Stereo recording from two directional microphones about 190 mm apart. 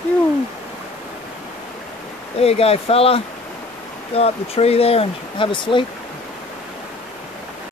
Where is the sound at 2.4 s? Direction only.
30° left (ahead or behind).